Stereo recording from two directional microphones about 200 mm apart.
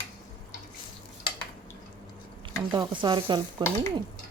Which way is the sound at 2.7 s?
20° right (ahead or behind).